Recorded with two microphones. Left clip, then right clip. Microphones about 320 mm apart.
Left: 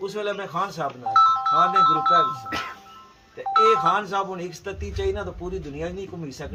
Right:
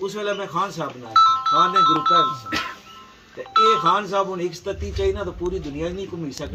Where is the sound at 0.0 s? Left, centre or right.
Centre.